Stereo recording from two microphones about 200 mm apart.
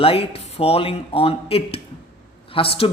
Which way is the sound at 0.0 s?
30° left (ahead or behind).